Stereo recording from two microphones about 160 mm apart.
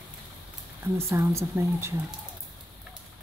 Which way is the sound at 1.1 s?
15° right (ahead or behind).